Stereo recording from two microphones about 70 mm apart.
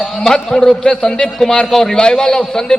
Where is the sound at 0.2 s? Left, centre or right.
Centre.